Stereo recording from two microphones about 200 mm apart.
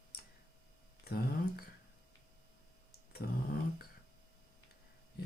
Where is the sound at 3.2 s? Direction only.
50° left (ahead or behind).